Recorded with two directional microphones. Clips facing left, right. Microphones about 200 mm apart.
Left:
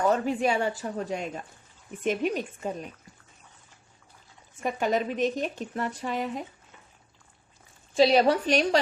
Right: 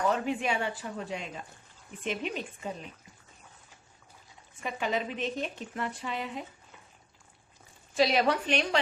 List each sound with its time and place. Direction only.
0.1 s a woman's voice: 40° left (ahead or behind)
4.6 s a woman's voice: 45° left (ahead or behind)
7.9 s a woman's voice: 30° left (ahead or behind)